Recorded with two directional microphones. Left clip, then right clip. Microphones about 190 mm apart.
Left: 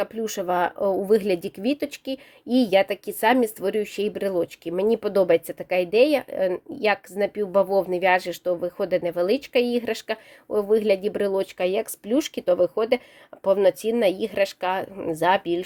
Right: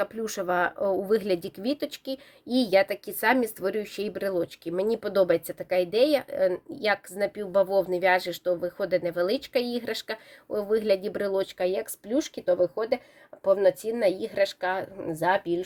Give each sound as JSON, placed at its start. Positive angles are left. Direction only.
{"t": 0.0, "sound": "speech", "side_deg": 25}
{"t": 12.0, "sound": "speech", "side_deg": 45}